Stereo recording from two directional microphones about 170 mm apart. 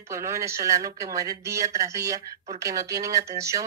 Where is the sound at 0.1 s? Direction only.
20° right (ahead or behind).